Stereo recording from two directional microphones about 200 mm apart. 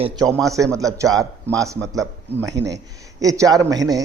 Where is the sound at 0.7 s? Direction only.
15° right (ahead or behind).